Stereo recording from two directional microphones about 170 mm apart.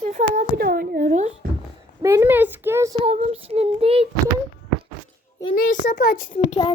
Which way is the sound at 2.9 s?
35° right (ahead or behind).